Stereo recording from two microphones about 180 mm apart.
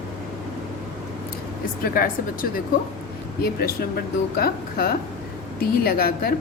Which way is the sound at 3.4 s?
55° left (ahead or behind).